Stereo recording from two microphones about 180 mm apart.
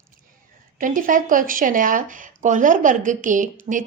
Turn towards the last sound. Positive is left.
turn(degrees=-45)  # may be behind; listen again after turning